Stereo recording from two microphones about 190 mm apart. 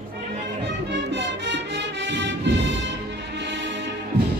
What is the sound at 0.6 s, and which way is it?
Music, 65° right (ahead or behind).